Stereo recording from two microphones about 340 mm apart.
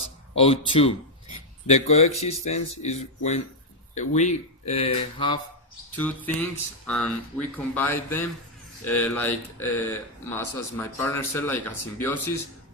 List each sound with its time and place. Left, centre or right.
0.3 s speech: centre
6.0 s speech: centre